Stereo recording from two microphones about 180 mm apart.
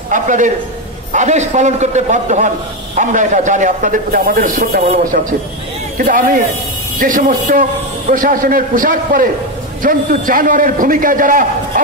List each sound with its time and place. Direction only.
0.1 s a man's voice: 45° right (ahead or behind)
5.9 s a man's voice: 50° right (ahead or behind)